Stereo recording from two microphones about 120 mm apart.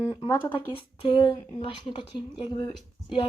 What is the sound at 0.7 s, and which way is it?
A woman's voice, 45° left (ahead or behind).